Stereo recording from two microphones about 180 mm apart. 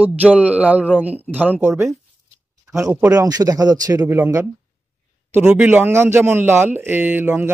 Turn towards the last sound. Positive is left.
turn(degrees=-10)  # may be behind; listen again after turning